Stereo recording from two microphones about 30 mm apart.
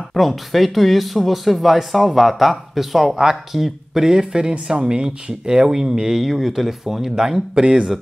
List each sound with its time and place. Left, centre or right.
0.3 s speech: centre
4.0 s speech: right
6.3 s speech: centre